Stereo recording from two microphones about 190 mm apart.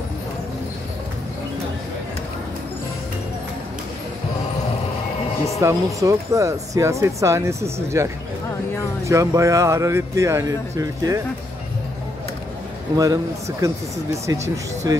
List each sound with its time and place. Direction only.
5.6 s speech: 15° right (ahead or behind)
12.9 s speech: 20° right (ahead or behind)